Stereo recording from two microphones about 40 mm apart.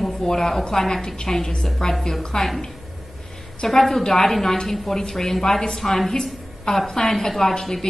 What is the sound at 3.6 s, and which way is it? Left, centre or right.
A woman's voice, centre.